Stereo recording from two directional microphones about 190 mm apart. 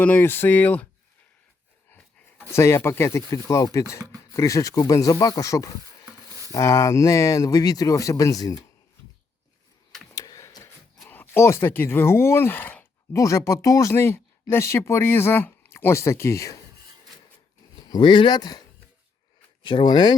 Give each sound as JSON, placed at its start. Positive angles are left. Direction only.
{"t": 0.0, "sound": "speech", "side_deg": 10}
{"t": 2.5, "sound": "speech", "side_deg": 15}
{"t": 6.1, "sound": "a sound", "side_deg": -15}
{"t": 6.5, "sound": "speech", "side_deg": 15}
{"t": 10.2, "sound": "a sound", "side_deg": 15}
{"t": 11.0, "sound": "speech", "side_deg": 10}
{"t": 17.8, "sound": "speech", "side_deg": 20}
{"t": 19.6, "sound": "speech", "side_deg": 25}